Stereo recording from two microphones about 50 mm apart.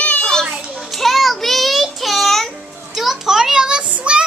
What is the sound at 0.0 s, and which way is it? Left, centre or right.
Children playing, left.